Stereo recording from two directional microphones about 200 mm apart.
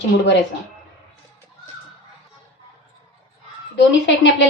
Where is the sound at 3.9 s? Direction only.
65° left (ahead or behind).